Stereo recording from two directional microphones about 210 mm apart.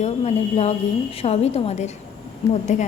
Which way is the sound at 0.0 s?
30° left (ahead or behind).